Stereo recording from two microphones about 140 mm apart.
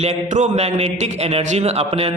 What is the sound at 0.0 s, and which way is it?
A man's voice, 55° right (ahead or behind).